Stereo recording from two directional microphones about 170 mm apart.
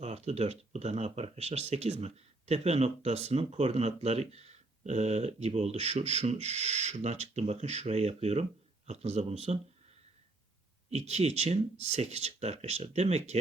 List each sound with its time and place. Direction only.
0.0 s speech: 40° right (ahead or behind)
10.9 s speech: 40° right (ahead or behind)